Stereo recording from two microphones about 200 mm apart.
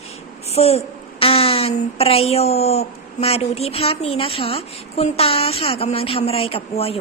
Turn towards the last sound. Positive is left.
turn(degrees=30)  # may be behind; listen again after turning